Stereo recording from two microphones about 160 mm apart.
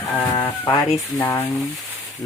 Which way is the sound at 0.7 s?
30° left (ahead or behind).